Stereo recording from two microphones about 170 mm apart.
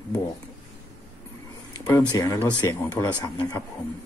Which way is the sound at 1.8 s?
20° left (ahead or behind).